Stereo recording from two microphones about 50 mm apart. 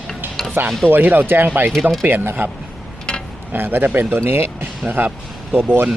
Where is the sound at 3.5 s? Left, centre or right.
Right.